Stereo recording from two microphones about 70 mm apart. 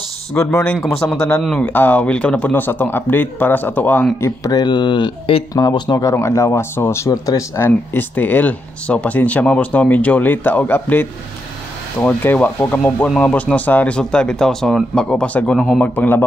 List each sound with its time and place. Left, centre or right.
0.3 s speech: centre
0.8 s speech: left
1.6 s speech: left
4.5 s speech: left
6.1 s speech: left
7.1 s speech: left
7.5 s speech: left
12.1 s speech: left